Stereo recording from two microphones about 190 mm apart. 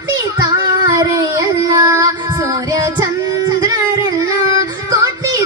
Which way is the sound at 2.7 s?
20° right (ahead or behind).